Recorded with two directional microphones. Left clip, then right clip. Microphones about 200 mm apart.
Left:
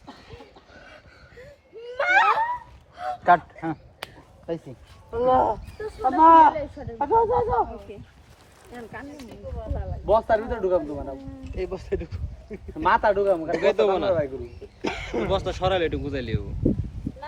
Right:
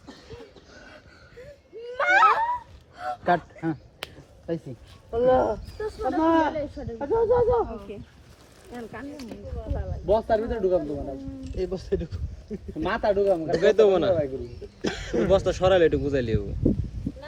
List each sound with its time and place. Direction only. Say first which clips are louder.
0.3 s a sound: right 1 dB; centre (ahead or behind)
3.2 s speech: left 5 dB; 30° left (ahead or behind)
5.1 s speech: left 1 dB; 25° left (ahead or behind)
5.7 s speech: left 3 dB; 5° left (ahead or behind)
6.2 s speech: left 10 dB; 30° left (ahead or behind)
7.9 s speech: right 2 dB; 10° right (ahead or behind)
10.1 s speech: left 2 dB; 30° left (ahead or behind)
13.6 s speech: right 5 dB; 5° left (ahead or behind)
14.8 s a sound: even; 20° left (ahead or behind)
15.3 s speech: right 5 dB; centre (ahead or behind)